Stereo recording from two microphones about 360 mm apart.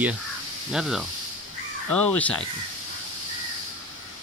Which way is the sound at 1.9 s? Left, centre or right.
Left.